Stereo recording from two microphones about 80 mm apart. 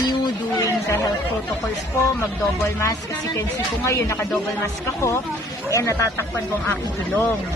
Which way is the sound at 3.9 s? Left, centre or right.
Left.